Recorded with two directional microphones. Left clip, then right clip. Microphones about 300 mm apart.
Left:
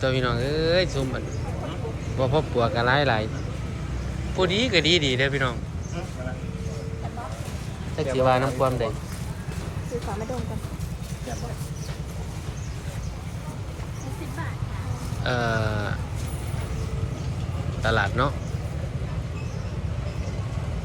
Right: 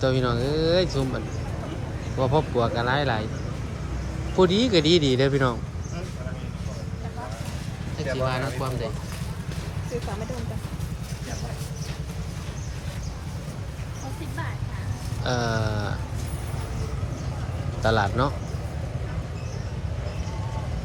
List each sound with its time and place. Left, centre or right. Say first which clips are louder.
0.0 s speech: even; centre
4.4 s speech: right 2 dB; centre
7.9 s speech: left 6 dB; centre
15.2 s speech: left 1 dB; centre
17.8 s speech: even; centre